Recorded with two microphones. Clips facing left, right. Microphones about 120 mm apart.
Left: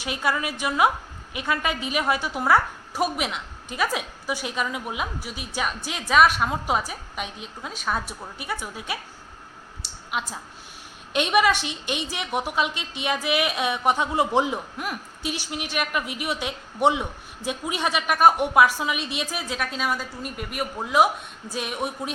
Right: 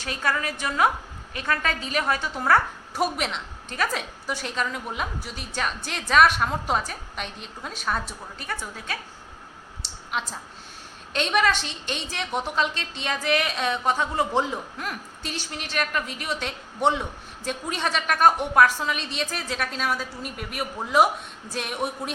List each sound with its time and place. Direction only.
0.0 s a woman's voice: 10° left (ahead or behind)
9.8 s a sound: 5° left (ahead or behind)
11.1 s a woman's voice: 15° left (ahead or behind)